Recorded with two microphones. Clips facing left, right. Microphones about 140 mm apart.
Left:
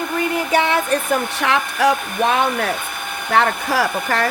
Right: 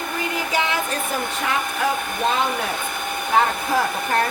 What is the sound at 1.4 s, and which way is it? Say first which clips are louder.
Speech: left 3 dB; 80° left.